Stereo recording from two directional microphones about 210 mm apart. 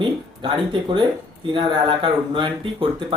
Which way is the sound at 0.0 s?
25° right (ahead or behind).